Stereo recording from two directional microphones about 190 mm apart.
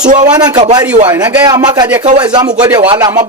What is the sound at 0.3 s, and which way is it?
Speech, 20° right (ahead or behind).